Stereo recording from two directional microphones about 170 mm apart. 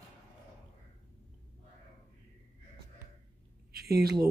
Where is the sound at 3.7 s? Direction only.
65° right (ahead or behind).